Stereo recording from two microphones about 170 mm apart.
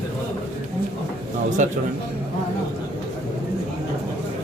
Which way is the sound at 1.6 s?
45° right (ahead or behind).